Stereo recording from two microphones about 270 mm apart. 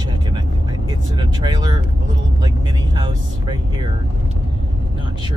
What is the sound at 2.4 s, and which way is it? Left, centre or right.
Speech, centre.